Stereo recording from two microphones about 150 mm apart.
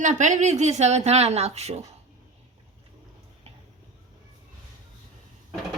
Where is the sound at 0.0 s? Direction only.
55° right (ahead or behind).